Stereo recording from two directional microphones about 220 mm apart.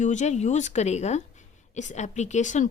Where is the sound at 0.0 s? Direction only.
35° left (ahead or behind).